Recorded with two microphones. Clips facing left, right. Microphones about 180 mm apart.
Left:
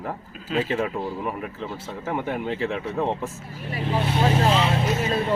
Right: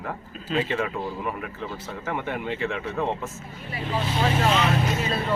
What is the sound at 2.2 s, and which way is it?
Speech, 30° left (ahead or behind).